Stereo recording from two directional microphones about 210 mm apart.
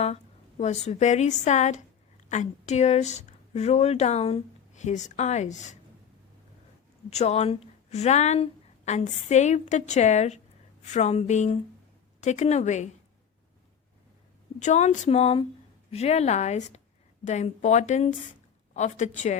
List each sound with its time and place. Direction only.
0.0 s a woman's voice: 30° left (ahead or behind)
7.1 s speech: 30° left (ahead or behind)
14.6 s speech: 35° left (ahead or behind)